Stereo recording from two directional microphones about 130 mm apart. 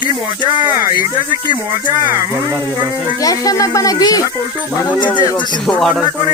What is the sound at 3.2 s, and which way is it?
Speech, 25° left (ahead or behind).